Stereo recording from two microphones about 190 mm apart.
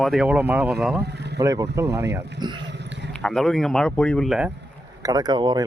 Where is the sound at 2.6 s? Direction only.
65° right (ahead or behind).